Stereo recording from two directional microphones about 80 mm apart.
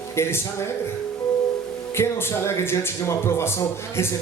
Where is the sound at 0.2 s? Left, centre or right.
Left.